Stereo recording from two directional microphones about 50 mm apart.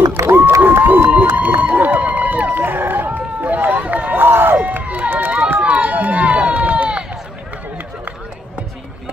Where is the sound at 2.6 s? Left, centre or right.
Right.